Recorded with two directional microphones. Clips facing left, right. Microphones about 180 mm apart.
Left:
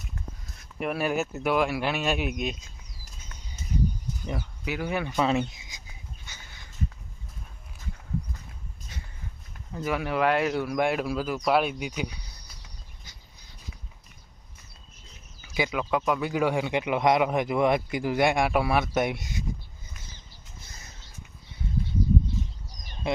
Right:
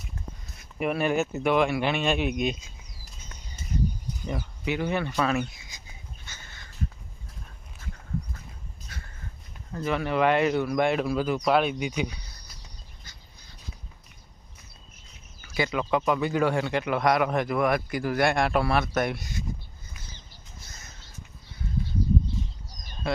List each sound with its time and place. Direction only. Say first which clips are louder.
0.6 s speech: right 2 dB; centre (ahead or behind)
4.3 s speech: right 3 dB; 5° left (ahead or behind)
5.2 s speech: left 1 dB; 25° left (ahead or behind)
6.2 s crow: right 1 dB; 15° left (ahead or behind)
9.7 s speech: right 1 dB; 10° left (ahead or behind)
15.4 s speech: right 1 dB; 10° left (ahead or behind)